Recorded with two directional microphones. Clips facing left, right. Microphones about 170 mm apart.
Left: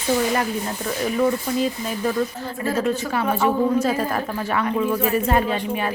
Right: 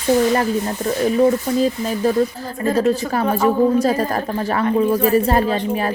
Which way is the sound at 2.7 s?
35° right (ahead or behind).